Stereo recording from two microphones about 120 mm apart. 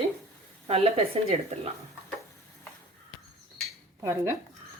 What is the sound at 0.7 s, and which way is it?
A woman's voice, 55° right (ahead or behind).